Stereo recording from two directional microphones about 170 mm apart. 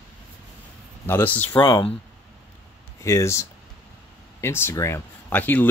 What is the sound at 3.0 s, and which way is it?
Speech, 15° left (ahead or behind).